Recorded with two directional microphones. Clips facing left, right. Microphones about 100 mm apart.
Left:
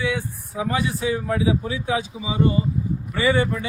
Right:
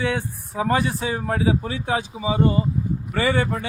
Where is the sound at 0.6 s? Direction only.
45° right (ahead or behind).